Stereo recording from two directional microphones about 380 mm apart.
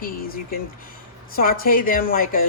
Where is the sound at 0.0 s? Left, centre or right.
Left.